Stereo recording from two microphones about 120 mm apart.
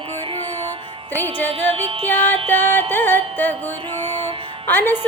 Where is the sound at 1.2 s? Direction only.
15° left (ahead or behind).